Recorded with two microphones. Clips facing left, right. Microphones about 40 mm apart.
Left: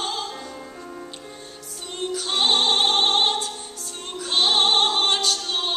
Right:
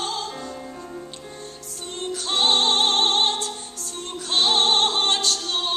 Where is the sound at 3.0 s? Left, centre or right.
Left.